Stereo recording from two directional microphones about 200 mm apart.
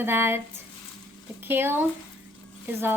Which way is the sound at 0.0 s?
10° right (ahead or behind).